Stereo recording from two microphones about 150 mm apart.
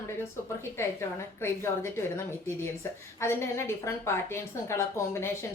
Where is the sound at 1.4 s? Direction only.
15° left (ahead or behind).